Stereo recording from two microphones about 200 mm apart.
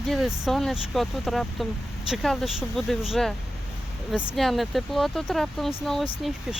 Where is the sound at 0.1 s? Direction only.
Centre (ahead or behind).